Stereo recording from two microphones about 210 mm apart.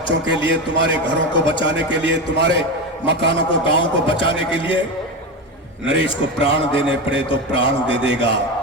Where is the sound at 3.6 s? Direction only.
25° left (ahead or behind).